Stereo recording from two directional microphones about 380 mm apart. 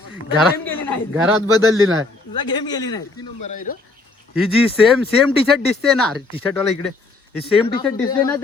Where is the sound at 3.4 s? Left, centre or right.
Left.